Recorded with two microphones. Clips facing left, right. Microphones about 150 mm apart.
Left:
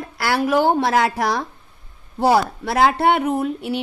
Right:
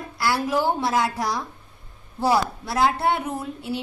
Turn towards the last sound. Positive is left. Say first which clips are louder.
# left 8 dB
turn(degrees=70)  # may be behind; listen again after turning